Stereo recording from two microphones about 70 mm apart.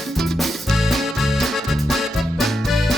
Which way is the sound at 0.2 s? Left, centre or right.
Centre.